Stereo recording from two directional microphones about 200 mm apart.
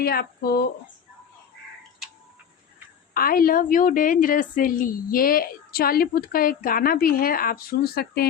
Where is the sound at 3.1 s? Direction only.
45° left (ahead or behind).